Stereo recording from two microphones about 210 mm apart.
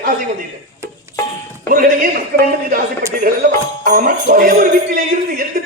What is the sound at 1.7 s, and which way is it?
Speech, 45° right (ahead or behind).